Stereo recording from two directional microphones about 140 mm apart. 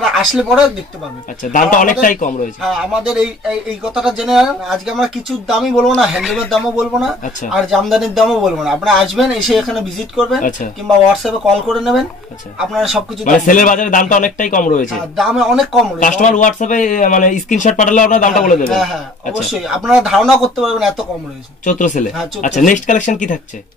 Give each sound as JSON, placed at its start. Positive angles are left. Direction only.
{"t": 0.0, "sound": "speech", "side_deg": -5}
{"t": 1.4, "sound": "a man's voice", "side_deg": 70}
{"t": 2.6, "sound": "speech", "side_deg": -5}
{"t": 13.2, "sound": "a man's voice", "side_deg": 70}
{"t": 14.9, "sound": "speech", "side_deg": -5}
{"t": 16.0, "sound": "speech", "side_deg": 65}
{"t": 18.7, "sound": "speech", "side_deg": 0}
{"t": 21.6, "sound": "speech", "side_deg": 65}